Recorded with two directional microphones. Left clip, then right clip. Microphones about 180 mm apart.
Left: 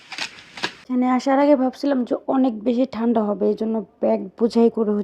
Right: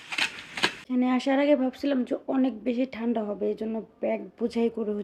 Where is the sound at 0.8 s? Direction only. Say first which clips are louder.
Left 6 dB; 25° left (ahead or behind).